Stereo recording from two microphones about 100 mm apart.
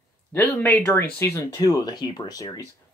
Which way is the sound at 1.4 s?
35° left (ahead or behind).